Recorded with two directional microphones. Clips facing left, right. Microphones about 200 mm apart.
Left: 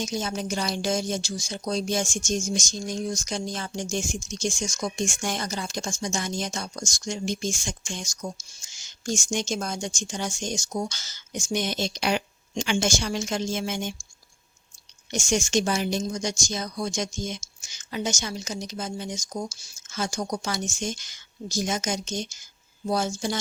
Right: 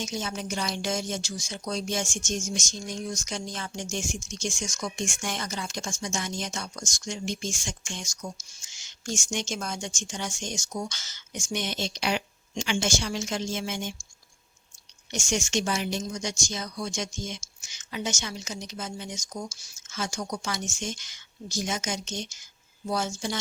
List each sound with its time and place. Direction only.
0.0 s speech: 35° left (ahead or behind)
15.1 s speech: 40° left (ahead or behind)